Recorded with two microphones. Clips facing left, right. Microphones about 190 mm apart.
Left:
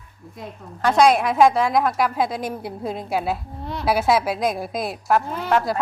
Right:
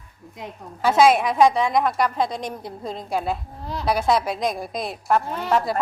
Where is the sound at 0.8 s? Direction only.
5° right (ahead or behind).